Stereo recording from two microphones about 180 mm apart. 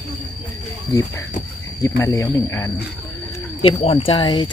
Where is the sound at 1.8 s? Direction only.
20° left (ahead or behind).